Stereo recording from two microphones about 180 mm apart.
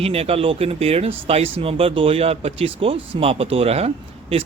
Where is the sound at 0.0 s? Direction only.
35° right (ahead or behind).